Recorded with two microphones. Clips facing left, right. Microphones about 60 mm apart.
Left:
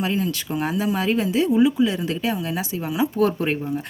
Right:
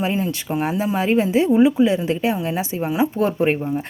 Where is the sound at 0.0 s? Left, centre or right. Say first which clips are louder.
Right 2 dB; right.